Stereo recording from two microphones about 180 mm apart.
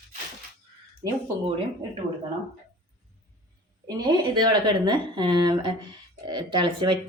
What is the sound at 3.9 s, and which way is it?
Speech, 20° right (ahead or behind).